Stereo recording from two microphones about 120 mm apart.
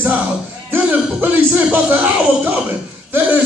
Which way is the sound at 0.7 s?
15° right (ahead or behind).